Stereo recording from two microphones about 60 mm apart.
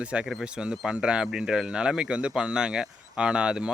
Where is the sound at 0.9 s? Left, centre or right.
Centre.